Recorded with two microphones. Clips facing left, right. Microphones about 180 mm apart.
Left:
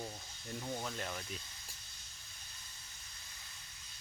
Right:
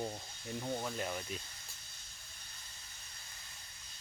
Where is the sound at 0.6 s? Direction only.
10° right (ahead or behind).